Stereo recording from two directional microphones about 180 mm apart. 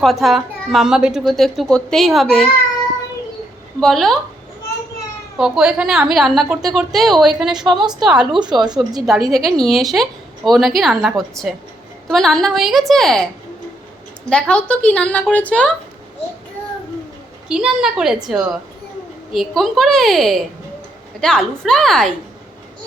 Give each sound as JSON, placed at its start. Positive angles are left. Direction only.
{"t": 0.0, "sound": "a woman's voice", "side_deg": 0}
{"t": 3.8, "sound": "a woman's voice", "side_deg": 0}
{"t": 5.4, "sound": "a woman's voice", "side_deg": -5}
{"t": 8.4, "sound": "speech", "side_deg": -25}
{"t": 9.3, "sound": "a woman's voice", "side_deg": 0}
{"t": 14.3, "sound": "a woman's voice", "side_deg": 5}
{"t": 17.5, "sound": "a woman's voice", "side_deg": -5}
{"t": 19.3, "sound": "a woman's voice", "side_deg": 0}